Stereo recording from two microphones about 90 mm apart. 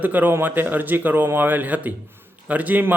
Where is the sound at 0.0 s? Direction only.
20° right (ahead or behind).